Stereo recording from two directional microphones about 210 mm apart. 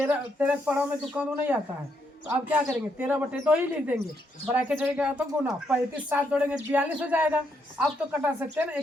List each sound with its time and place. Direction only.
0.0 s speech: 10° right (ahead or behind)